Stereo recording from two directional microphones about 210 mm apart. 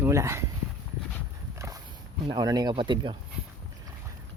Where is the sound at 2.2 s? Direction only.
20° right (ahead or behind).